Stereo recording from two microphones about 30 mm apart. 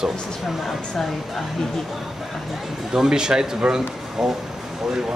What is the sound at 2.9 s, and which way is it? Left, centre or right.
A man's voice, right.